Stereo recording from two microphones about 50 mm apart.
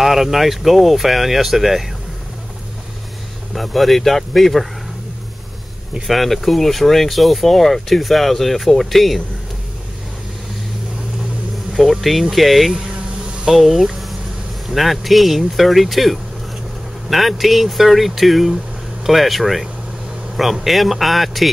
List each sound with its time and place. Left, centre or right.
0.0 s speech: centre
3.5 s speech: centre
6.0 s speech: centre
11.7 s speech: centre
12.9 s a sound: right
13.5 s speech: centre